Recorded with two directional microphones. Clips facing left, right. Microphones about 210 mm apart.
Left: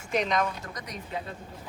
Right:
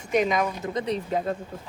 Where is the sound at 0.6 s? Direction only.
25° right (ahead or behind).